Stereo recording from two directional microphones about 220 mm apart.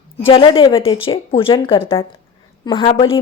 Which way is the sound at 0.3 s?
25° left (ahead or behind).